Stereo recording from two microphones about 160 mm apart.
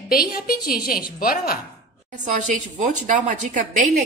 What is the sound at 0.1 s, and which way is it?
A woman's voice, 70° left (ahead or behind).